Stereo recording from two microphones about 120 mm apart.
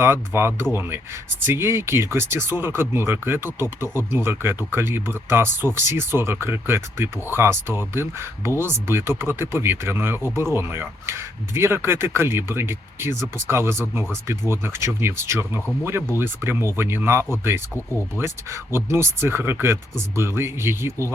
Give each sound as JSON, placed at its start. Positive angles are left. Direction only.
{"t": 0.0, "sound": "speech", "side_deg": -20}